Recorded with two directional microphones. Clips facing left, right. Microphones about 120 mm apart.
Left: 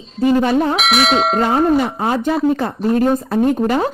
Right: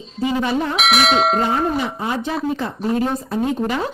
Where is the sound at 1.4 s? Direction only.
55° left (ahead or behind).